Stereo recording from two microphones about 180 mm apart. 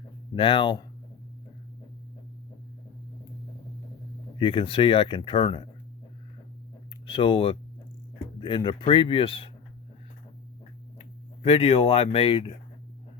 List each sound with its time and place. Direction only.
0.3 s speech: 30° left (ahead or behind)
4.4 s speech: 30° left (ahead or behind)
7.1 s speech: 30° left (ahead or behind)
11.4 s speech: 35° left (ahead or behind)